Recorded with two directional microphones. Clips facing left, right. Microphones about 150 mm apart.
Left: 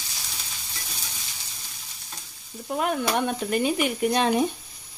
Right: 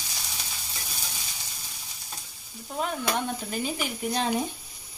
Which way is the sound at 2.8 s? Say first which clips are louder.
Left 4 dB; 65° left (ahead or behind).